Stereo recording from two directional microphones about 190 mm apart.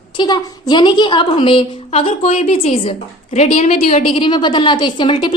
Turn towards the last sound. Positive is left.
turn(degrees=25)  # may be behind; listen again after turning